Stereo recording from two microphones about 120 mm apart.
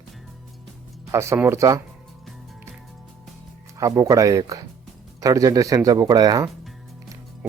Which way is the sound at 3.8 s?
30° right (ahead or behind).